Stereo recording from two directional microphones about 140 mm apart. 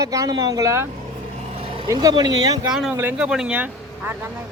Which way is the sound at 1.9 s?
25° right (ahead or behind).